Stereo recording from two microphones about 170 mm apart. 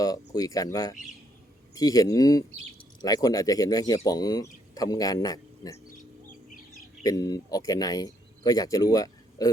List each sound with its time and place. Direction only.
0.0 s speech: 20° left (ahead or behind)
7.0 s speech: 20° left (ahead or behind)